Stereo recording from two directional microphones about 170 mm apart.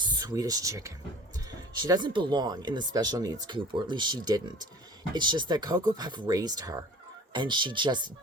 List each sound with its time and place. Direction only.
0.1 s speech: 20° right (ahead or behind)